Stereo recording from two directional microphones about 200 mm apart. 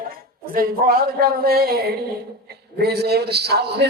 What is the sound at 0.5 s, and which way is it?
A man's voice, 45° right (ahead or behind).